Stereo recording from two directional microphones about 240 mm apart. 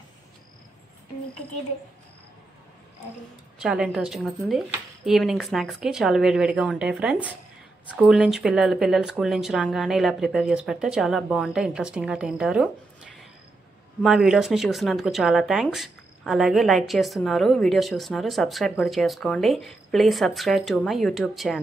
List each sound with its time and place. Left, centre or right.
3.5 s speech: centre